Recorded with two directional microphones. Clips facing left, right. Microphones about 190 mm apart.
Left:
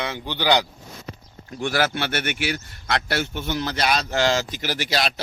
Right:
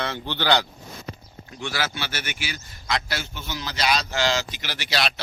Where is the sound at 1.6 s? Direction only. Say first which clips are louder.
Left 6 dB; 50° left (ahead or behind).